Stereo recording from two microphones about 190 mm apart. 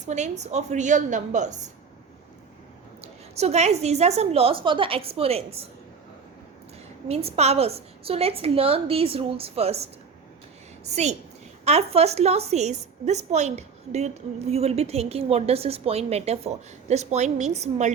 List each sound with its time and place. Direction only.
0.0 s a woman's voice: 40° right (ahead or behind)
3.3 s a woman's voice: 35° right (ahead or behind)
7.1 s a woman's voice: 30° right (ahead or behind)